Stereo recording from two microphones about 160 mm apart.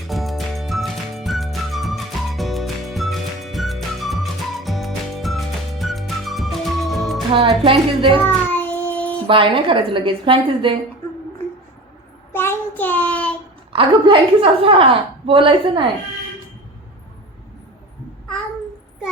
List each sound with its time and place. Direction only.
0.1 s music: centre (ahead or behind)
7.3 s a woman's voice: 35° right (ahead or behind)
8.4 s child singing: 10° left (ahead or behind)
9.2 s a woman's voice: 35° right (ahead or behind)
12.3 s child singing: 15° left (ahead or behind)
13.7 s a woman's voice: 35° right (ahead or behind)